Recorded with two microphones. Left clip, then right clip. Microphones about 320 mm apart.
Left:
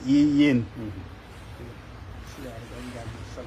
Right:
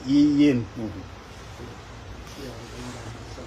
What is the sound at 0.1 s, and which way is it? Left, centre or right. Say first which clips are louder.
Speech: right 1 dB; centre.